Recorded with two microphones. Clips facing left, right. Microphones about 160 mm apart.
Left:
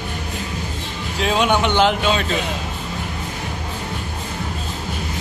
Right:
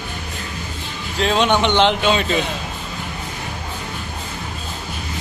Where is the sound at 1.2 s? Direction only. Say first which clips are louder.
Right 1 dB; 5° left (ahead or behind).